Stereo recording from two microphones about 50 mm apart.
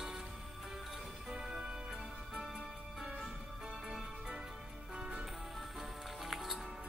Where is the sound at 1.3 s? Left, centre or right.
Centre.